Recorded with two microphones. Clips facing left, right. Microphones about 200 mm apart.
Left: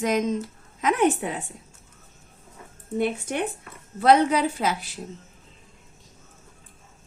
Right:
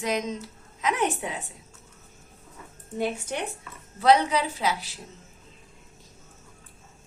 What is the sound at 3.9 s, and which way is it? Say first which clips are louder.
A woman's voice: left 2 dB; 50° left (ahead or behind).